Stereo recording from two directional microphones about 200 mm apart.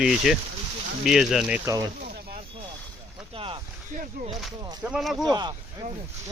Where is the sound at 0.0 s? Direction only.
Centre (ahead or behind).